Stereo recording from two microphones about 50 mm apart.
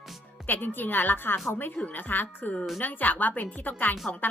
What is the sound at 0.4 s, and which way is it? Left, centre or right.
A woman's voice, left.